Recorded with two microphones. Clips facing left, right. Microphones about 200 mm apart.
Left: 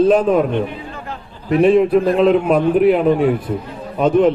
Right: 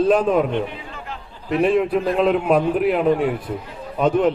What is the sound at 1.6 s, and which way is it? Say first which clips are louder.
A man's voice: left 6 dB; centre (ahead or behind).